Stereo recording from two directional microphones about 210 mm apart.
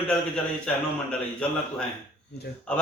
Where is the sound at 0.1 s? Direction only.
5° left (ahead or behind).